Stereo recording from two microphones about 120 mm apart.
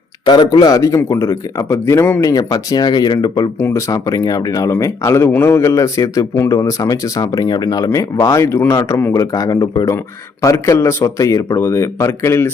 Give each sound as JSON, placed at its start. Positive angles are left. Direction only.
{"t": 0.3, "sound": "speech", "side_deg": 35}
{"t": 2.2, "sound": "speech", "side_deg": 30}
{"t": 3.6, "sound": "speech", "side_deg": 25}